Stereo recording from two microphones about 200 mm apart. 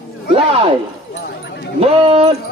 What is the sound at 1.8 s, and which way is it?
Speech, 30° right (ahead or behind).